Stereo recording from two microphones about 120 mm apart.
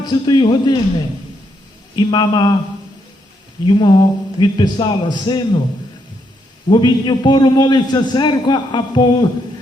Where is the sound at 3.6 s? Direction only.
40° left (ahead or behind).